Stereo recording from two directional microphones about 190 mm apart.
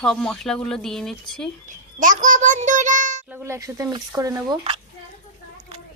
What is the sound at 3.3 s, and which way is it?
Speech, 15° right (ahead or behind).